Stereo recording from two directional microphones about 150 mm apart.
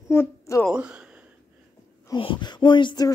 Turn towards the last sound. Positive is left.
turn(degrees=30)  # may be behind; listen again after turning